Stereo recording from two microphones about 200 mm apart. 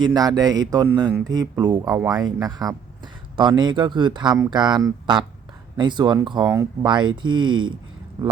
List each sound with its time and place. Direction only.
0.0 s speech: 20° right (ahead or behind)